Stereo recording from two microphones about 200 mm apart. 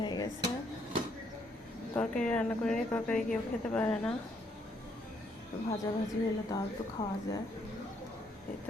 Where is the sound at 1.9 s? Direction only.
5° left (ahead or behind).